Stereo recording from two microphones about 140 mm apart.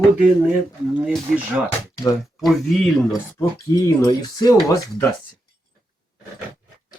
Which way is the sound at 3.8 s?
25° left (ahead or behind).